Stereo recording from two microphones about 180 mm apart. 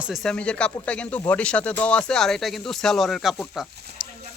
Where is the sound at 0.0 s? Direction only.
Centre (ahead or behind).